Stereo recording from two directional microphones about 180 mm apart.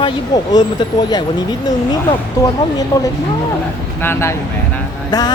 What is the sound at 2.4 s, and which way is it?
A woman's voice, 20° left (ahead or behind).